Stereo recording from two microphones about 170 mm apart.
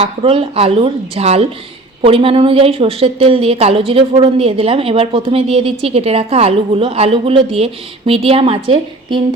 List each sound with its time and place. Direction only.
0.0 s a woman's voice: 35° right (ahead or behind)